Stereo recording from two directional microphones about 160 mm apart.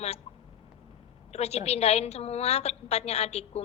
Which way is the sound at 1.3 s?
40° left (ahead or behind).